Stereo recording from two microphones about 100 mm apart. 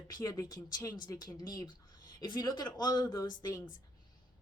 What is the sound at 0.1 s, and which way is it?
Speech, 40° left (ahead or behind).